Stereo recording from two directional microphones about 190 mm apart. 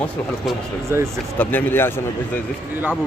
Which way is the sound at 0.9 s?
15° right (ahead or behind).